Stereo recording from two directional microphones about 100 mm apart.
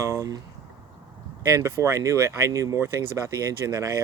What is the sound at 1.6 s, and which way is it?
Speech, 30° right (ahead or behind).